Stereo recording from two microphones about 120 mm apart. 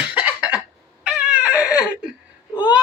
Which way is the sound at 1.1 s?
10° right (ahead or behind).